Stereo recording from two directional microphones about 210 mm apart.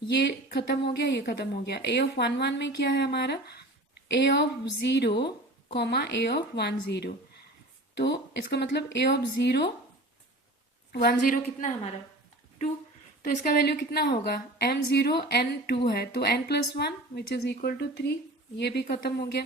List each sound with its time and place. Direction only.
0.2 s a woman's voice: 55° left (ahead or behind)
10.9 s a woman's voice: 40° left (ahead or behind)
13.2 s a woman's voice: 45° left (ahead or behind)